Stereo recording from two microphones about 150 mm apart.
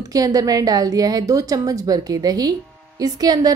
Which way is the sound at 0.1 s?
25° right (ahead or behind).